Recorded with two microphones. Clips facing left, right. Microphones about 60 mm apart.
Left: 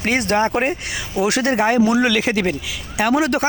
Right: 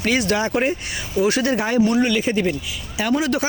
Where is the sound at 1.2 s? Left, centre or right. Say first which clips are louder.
Left 1 dB; left.